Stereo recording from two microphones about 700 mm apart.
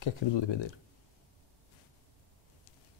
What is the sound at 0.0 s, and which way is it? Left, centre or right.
Speech, left.